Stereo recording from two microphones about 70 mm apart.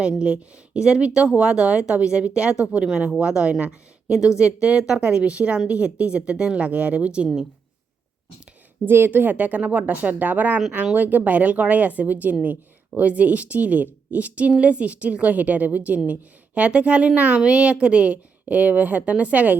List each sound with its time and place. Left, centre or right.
0.2 s a woman's voice: centre
8.8 s a woman's voice: right